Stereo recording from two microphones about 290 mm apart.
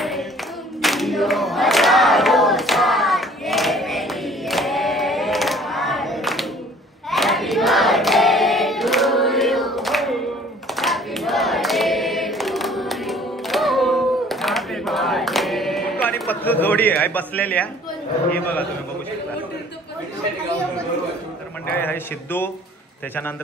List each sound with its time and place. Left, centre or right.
0.0 s clapping: centre
0.8 s crowd: centre
7.1 s hands: centre
10.8 s choir: centre
21.7 s speech: centre